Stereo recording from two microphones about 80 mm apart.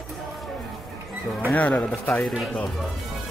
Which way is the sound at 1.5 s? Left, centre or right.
Centre.